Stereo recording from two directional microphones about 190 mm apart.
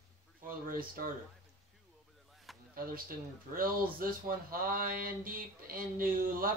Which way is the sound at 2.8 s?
50° right (ahead or behind).